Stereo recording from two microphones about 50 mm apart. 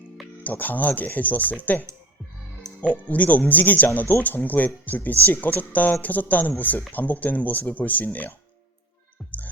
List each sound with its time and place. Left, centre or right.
0.4 s speech: left